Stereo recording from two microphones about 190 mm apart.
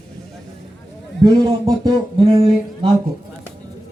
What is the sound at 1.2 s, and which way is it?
Speech, 20° right (ahead or behind).